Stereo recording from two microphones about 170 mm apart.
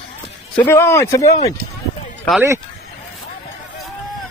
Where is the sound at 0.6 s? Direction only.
15° left (ahead or behind).